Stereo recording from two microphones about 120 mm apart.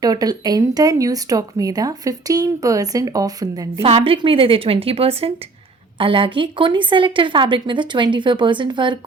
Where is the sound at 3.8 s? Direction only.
50° right (ahead or behind).